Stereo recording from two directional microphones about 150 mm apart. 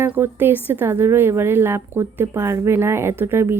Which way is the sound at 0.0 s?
15° right (ahead or behind).